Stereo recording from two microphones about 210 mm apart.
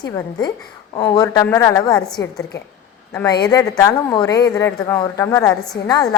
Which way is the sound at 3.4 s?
15° left (ahead or behind).